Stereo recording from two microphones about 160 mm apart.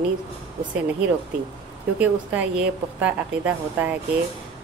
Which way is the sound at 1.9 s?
10° right (ahead or behind).